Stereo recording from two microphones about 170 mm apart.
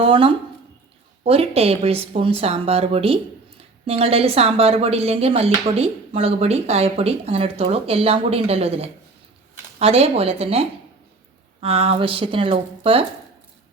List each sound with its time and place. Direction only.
0.0 s speech: 30° right (ahead or behind)